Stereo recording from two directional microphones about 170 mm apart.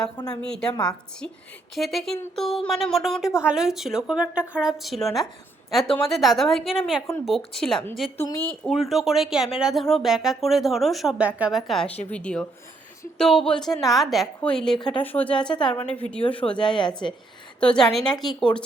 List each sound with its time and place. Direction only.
0.4 s a woman's voice: 5° left (ahead or behind)
1.7 s a woman's voice: centre (ahead or behind)
8.2 s speech: 15° left (ahead or behind)
8.6 s a woman's voice: centre (ahead or behind)
14.8 s a woman's voice: 25° left (ahead or behind)
15.0 s speech: 10° left (ahead or behind)
16.6 s a woman's voice: 30° left (ahead or behind)
17.6 s a woman's voice: 5° left (ahead or behind)